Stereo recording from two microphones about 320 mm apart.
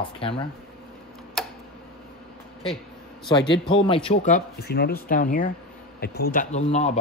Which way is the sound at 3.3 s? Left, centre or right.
Centre.